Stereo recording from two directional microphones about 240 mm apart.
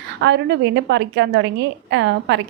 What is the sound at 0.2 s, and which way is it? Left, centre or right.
A woman's voice, right.